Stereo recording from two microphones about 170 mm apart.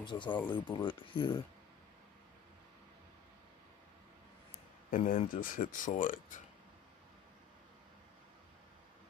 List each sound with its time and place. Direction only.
0.0 s speech: 30° left (ahead or behind)
4.9 s speech: 45° left (ahead or behind)